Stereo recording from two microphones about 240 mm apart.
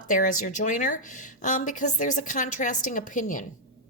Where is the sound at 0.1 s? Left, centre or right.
Left.